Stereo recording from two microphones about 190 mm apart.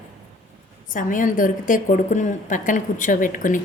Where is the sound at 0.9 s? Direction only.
45° left (ahead or behind).